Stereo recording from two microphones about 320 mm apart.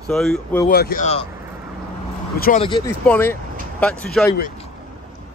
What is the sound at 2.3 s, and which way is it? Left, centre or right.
Speech, left.